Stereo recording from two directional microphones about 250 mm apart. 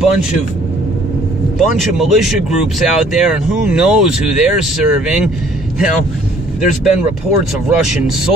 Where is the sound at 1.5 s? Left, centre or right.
Centre.